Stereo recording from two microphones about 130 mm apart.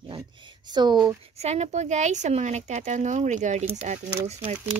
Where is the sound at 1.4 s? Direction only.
55° right (ahead or behind).